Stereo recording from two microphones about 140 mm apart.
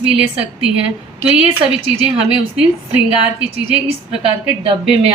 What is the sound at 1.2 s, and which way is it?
Speech, 10° right (ahead or behind).